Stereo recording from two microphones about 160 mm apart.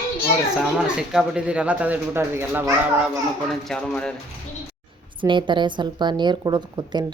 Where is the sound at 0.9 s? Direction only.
5° right (ahead or behind).